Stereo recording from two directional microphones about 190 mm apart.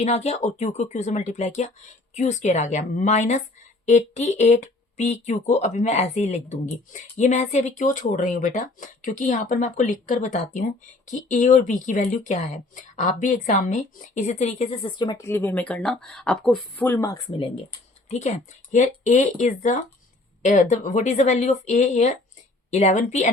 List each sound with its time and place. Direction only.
0.0 s speech: 35° left (ahead or behind); by 17.2 s 15° left (ahead or behind)
18.1 s speech: 40° left (ahead or behind)